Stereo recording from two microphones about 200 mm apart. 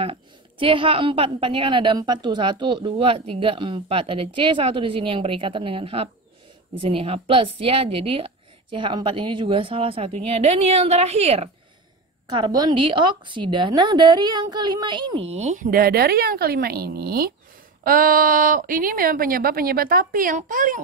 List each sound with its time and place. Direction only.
0.0 s a woman's voice: 25° right (ahead or behind)
12.3 s a woman's voice: 20° right (ahead or behind); by 20.8 s 45° right (ahead or behind)